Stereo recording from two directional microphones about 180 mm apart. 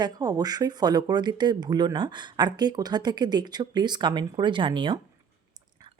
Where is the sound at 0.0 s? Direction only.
20° right (ahead or behind).